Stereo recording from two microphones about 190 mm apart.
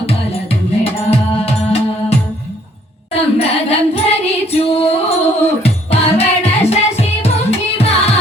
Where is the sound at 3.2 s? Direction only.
30° left (ahead or behind).